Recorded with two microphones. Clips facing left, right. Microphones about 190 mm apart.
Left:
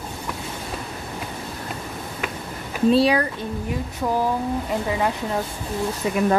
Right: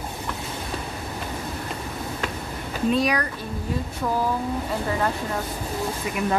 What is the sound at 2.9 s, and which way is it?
Speech, 30° left (ahead or behind).